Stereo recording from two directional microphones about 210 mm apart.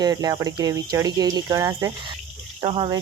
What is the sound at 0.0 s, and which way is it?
Speech, 20° right (ahead or behind).